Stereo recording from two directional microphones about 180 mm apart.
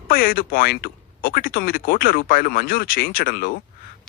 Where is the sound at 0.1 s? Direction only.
55° left (ahead or behind).